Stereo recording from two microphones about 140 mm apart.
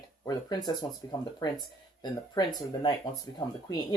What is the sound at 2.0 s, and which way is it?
Speech, 30° left (ahead or behind).